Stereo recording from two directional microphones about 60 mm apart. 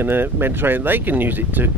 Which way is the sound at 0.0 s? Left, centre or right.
Right.